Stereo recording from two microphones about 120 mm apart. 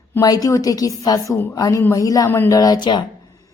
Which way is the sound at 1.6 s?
30° left (ahead or behind).